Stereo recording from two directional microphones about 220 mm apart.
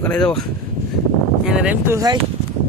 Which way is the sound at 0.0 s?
5° left (ahead or behind).